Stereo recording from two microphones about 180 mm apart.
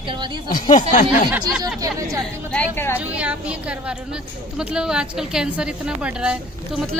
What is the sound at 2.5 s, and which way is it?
Speech, 10° left (ahead or behind).